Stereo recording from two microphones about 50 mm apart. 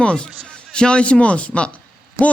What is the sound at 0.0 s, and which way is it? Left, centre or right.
A man's voice, centre.